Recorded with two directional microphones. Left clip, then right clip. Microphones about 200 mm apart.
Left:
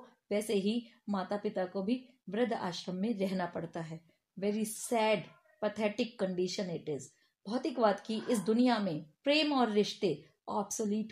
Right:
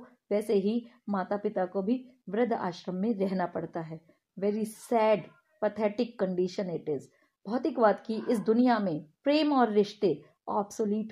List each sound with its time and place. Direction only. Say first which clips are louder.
0.3 s a woman's voice: right 5 dB; 20° right (ahead or behind)